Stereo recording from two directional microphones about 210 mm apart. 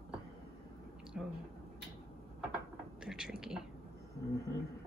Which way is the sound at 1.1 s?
5° right (ahead or behind).